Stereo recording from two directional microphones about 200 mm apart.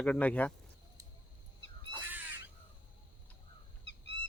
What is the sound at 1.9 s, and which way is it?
Crow, 10° right (ahead or behind).